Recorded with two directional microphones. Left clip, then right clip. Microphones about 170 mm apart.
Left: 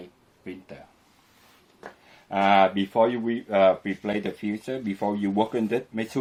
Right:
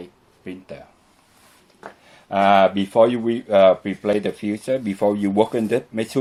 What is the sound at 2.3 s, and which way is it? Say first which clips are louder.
Speech: right 5 dB; 35° right (ahead or behind).